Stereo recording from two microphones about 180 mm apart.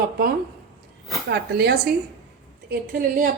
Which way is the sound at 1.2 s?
65° right (ahead or behind).